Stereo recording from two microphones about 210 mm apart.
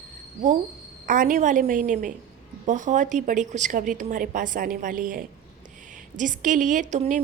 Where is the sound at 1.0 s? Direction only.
40° right (ahead or behind).